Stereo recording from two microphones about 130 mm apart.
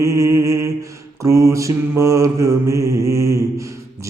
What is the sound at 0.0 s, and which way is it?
Mantra, 25° right (ahead or behind).